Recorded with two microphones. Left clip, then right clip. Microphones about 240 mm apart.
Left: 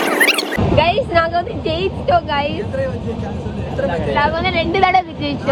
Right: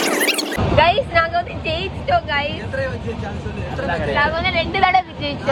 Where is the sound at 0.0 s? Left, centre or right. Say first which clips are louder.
Left 4 dB; centre.